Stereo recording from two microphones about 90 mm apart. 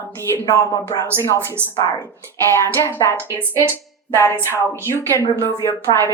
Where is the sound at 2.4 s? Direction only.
30° left (ahead or behind).